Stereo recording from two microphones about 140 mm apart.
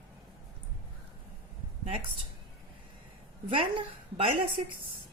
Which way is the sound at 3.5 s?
40° right (ahead or behind).